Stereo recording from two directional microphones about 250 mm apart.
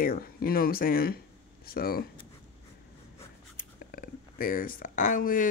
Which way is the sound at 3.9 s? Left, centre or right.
Left.